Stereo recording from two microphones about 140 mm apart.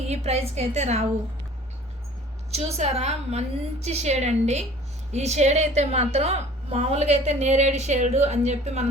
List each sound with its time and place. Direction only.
0.1 s a woman's voice: 50° right (ahead or behind)
2.5 s a woman's voice: 50° right (ahead or behind)